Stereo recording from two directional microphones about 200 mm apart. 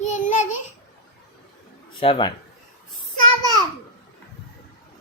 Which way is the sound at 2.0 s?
25° left (ahead or behind).